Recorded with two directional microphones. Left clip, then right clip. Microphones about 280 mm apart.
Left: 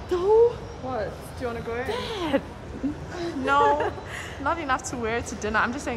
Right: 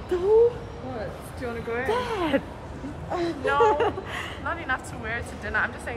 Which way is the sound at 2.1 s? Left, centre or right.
Centre.